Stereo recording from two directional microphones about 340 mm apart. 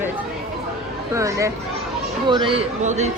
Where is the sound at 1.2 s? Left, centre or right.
Centre.